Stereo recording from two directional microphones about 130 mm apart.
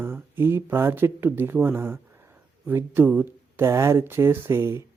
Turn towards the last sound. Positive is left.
turn(degrees=-20)  # may be behind; listen again after turning